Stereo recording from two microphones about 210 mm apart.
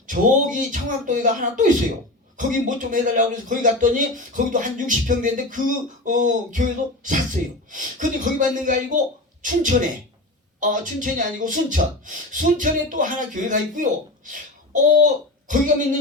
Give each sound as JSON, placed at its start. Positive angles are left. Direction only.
{"t": 0.1, "sound": "speech", "side_deg": -40}